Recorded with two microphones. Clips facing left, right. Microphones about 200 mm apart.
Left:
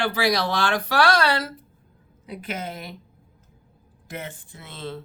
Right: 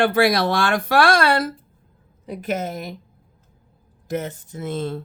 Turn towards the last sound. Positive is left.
turn(degrees=-45)  # may be behind; listen again after turning